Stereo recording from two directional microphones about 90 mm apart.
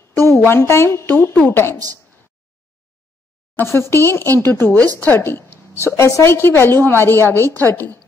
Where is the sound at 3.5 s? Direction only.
25° left (ahead or behind).